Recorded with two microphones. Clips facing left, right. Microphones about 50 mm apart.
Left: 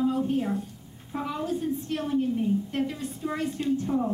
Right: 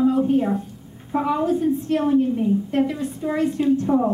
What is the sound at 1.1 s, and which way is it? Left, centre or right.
A woman's voice, right.